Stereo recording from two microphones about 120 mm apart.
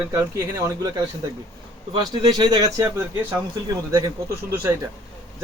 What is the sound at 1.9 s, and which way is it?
Speech, 40° right (ahead or behind).